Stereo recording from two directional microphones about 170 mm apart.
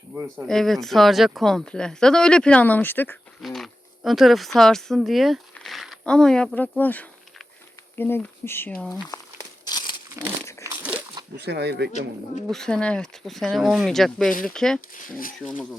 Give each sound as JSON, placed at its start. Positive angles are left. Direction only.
{"t": 0.4, "sound": "speech", "side_deg": 0}
{"t": 3.4, "sound": "speech", "side_deg": 0}
{"t": 9.1, "sound": "crumpling", "side_deg": 20}
{"t": 10.2, "sound": "crumpling", "side_deg": -20}
{"t": 10.6, "sound": "crunch", "side_deg": -15}
{"t": 10.9, "sound": "a sound", "side_deg": -25}
{"t": 11.3, "sound": "speech", "side_deg": -75}
{"t": 12.5, "sound": "speech", "side_deg": 5}
{"t": 14.9, "sound": "speech", "side_deg": 55}
{"t": 15.4, "sound": "speech", "side_deg": 0}